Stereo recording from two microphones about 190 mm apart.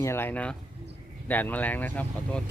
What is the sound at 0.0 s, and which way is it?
Speech, 10° left (ahead or behind).